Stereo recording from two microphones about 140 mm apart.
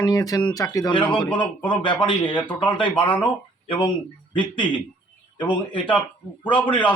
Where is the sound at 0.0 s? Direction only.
25° left (ahead or behind).